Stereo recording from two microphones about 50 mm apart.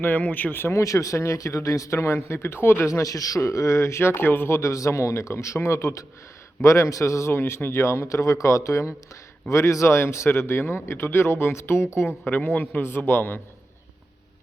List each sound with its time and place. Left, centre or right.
0.0 s a man's voice: left
0.7 s speech: left
2.8 s speech: left
5.5 s a man's voice: left
12.2 s a man's voice: left
12.8 s a man's voice: left